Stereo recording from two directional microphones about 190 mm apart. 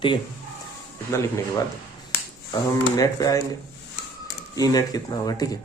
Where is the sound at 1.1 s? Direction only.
15° left (ahead or behind).